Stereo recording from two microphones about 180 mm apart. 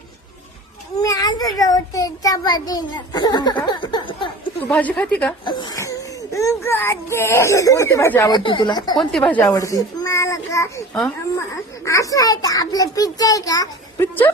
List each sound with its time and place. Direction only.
1.0 s a child's voice: 20° left (ahead or behind)
4.7 s a child's voice: 10° left (ahead or behind)
5.5 s speech: 25° left (ahead or behind)
9.0 s speech: centre (ahead or behind)
9.4 s a child's voice: 20° left (ahead or behind)
11.9 s a child's voice: 20° left (ahead or behind)